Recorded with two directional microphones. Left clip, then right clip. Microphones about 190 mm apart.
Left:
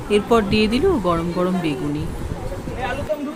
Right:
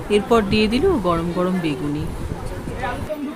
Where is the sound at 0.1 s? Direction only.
Centre (ahead or behind).